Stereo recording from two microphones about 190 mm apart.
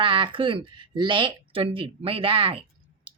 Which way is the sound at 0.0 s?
25° right (ahead or behind).